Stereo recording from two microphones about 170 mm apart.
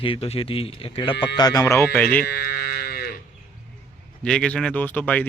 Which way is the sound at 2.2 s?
65° left (ahead or behind).